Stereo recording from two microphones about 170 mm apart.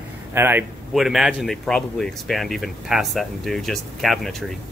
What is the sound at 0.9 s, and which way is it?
Speech, centre (ahead or behind).